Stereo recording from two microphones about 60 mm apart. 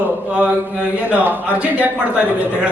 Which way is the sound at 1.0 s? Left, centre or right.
Right.